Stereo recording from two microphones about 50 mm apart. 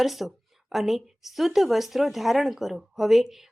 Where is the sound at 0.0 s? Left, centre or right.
Centre.